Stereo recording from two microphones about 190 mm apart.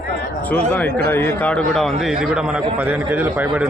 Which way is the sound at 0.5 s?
10° left (ahead or behind).